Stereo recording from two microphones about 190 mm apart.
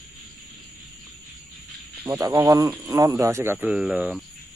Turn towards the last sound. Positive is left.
turn(degrees=-10)  # may be behind; listen again after turning